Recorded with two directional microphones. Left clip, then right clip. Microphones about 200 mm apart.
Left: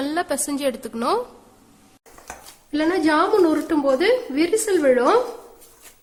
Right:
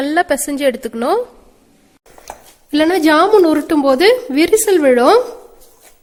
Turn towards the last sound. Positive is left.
turn(degrees=-50)  # may be behind; listen again after turning